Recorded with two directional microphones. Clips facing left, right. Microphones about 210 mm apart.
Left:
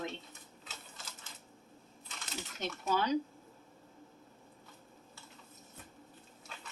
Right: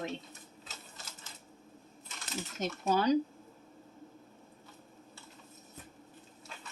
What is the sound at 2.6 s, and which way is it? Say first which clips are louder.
Speech: right 5 dB; 40° right (ahead or behind).